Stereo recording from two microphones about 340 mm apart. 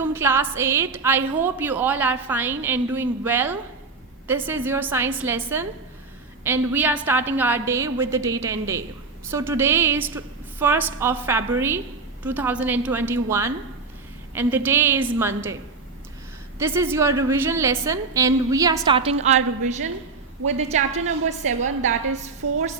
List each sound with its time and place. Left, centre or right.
0.0 s a woman's voice: centre
6.7 s a woman's voice: centre
16.6 s a woman's voice: centre